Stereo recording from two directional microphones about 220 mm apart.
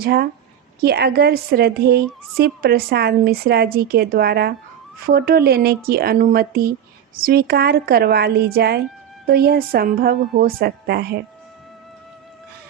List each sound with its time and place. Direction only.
0.0 s a woman's voice: 45° right (ahead or behind)